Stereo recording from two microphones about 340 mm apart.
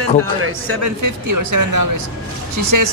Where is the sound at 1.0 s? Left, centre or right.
Right.